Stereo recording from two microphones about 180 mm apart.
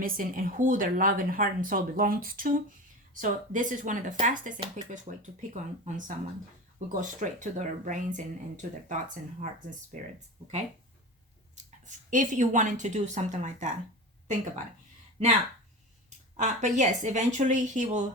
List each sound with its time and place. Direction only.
0.0 s speech: 50° right (ahead or behind)
16.0 s speech: 40° right (ahead or behind)